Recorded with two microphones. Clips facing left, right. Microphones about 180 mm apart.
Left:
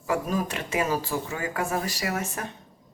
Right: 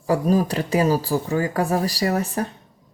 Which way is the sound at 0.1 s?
35° right (ahead or behind).